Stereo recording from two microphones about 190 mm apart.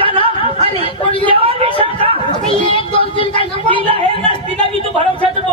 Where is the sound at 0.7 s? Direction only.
25° left (ahead or behind).